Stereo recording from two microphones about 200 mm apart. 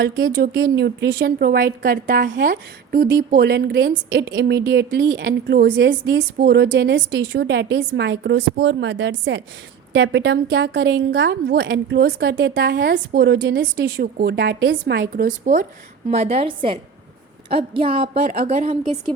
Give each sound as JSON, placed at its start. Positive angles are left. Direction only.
{"t": 0.0, "sound": "a woman's voice", "side_deg": -55}
{"t": 2.4, "sound": "a woman's voice", "side_deg": -45}
{"t": 15.1, "sound": "a woman's voice", "side_deg": -45}